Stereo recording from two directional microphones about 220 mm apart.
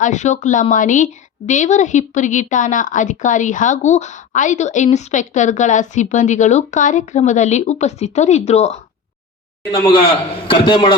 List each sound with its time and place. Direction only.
0.0 s a woman's voice: 35° left (ahead or behind)